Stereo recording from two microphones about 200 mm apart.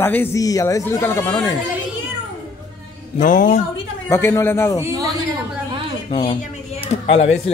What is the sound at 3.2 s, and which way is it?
Speech, 40° left (ahead or behind).